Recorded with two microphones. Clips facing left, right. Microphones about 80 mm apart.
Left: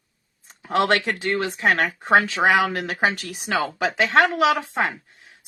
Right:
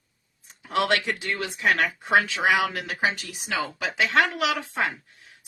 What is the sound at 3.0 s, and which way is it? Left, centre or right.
Speech, left.